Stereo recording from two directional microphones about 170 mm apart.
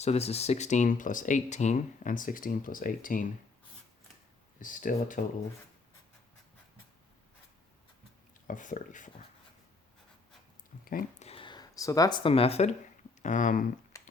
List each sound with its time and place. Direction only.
0.0 s speech: 35° left (ahead or behind); by 3.2 s 55° left (ahead or behind)
4.6 s speech: 50° left (ahead or behind)
8.4 s speech: 50° left (ahead or behind)
11.2 s a sound: 35° left (ahead or behind)
13.2 s speech: 50° left (ahead or behind)
13.9 s music: 20° left (ahead or behind)